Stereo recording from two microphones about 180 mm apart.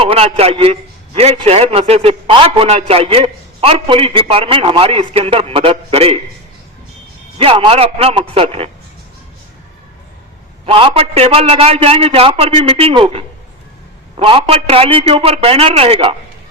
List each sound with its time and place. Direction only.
0.0 s a man's voice: 35° right (ahead or behind)
7.3 s a man's voice: 30° right (ahead or behind)
10.7 s a man's voice: 30° right (ahead or behind)